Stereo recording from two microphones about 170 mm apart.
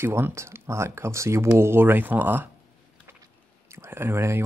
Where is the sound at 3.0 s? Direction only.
15° right (ahead or behind).